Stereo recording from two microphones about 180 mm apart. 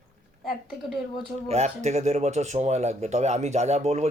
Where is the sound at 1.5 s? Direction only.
40° right (ahead or behind).